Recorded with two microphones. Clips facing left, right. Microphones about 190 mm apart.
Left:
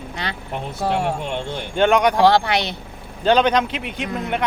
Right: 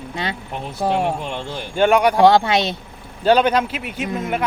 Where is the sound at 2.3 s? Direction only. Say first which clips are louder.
Right 2 dB; 20° right (ahead or behind).